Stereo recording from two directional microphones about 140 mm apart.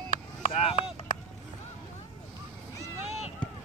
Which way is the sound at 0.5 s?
45° left (ahead or behind).